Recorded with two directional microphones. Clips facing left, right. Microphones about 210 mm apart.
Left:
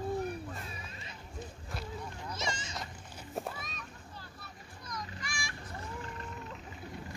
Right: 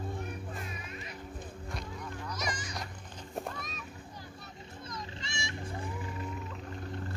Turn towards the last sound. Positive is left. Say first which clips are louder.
# right 2 dB
turn(degrees=-25)  # may be behind; listen again after turning